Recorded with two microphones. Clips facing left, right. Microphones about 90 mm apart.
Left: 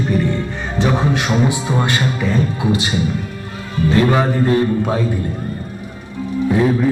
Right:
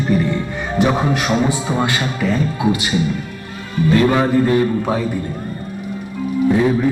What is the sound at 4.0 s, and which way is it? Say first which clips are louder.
Speech: even; 25° left (ahead or behind).